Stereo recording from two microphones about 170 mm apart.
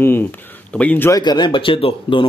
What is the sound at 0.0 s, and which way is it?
Speech, 10° left (ahead or behind).